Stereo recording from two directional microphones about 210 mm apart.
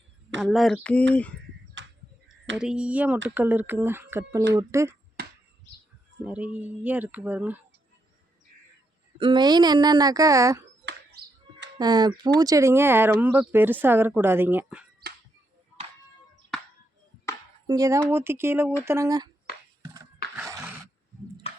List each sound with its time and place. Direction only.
0.3 s speech: centre (ahead or behind)
1.8 s a sound: 60° right (ahead or behind)
2.6 s speech: 5° right (ahead or behind)
5.2 s a sound: 50° right (ahead or behind)
6.2 s speech: 5° right (ahead or behind)
9.1 s a woman's voice: 25° right (ahead or behind)
11.8 s a woman's voice: 20° right (ahead or behind)
17.7 s speech: 15° right (ahead or behind)
19.8 s a sound: 20° right (ahead or behind)
20.3 s horse: 5° right (ahead or behind)
21.5 s music: 30° left (ahead or behind)